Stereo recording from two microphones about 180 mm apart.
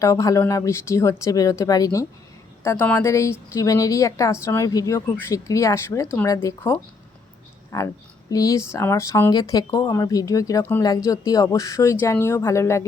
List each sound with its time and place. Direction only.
0.0 s speech: 15° left (ahead or behind)